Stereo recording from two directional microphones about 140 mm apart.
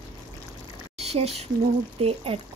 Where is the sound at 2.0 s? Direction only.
40° right (ahead or behind).